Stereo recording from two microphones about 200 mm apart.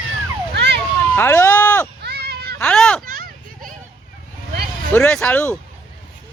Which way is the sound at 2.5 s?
5° left (ahead or behind).